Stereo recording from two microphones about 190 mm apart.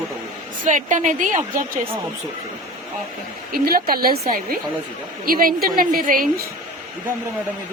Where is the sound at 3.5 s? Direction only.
50° right (ahead or behind).